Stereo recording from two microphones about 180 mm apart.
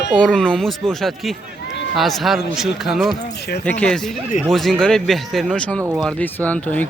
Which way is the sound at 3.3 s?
65° left (ahead or behind).